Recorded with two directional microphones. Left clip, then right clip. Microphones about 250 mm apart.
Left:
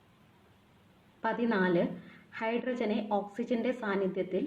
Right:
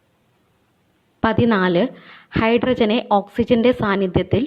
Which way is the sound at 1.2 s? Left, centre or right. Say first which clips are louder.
Right 13 dB; right.